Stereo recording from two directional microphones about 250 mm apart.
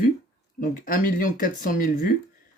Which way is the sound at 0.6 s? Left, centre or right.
Left.